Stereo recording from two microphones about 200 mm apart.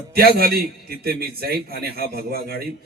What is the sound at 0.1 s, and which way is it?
A man's voice, 50° right (ahead or behind).